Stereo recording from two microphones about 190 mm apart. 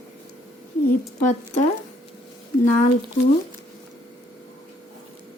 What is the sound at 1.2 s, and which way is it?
Speech, 40° left (ahead or behind).